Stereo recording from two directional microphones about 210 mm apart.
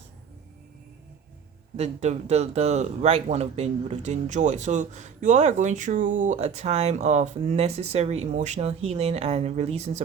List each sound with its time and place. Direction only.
1.7 s speech: 30° right (ahead or behind)